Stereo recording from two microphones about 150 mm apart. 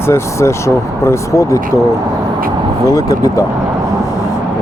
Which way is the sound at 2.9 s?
20° left (ahead or behind).